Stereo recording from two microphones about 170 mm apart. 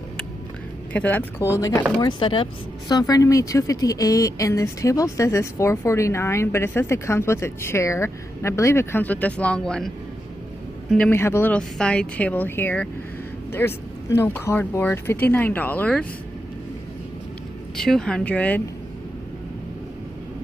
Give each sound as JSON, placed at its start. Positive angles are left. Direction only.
{"t": 0.9, "sound": "speech", "side_deg": 10}
{"t": 2.0, "sound": "speech", "side_deg": 30}
{"t": 17.7, "sound": "speech", "side_deg": 5}